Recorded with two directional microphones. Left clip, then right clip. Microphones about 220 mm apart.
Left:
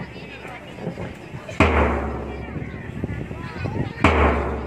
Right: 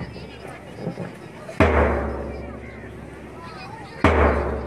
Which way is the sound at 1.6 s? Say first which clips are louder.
Even; 45° left (ahead or behind).